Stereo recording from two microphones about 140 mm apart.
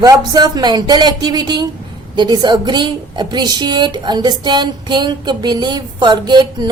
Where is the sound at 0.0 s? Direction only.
30° right (ahead or behind).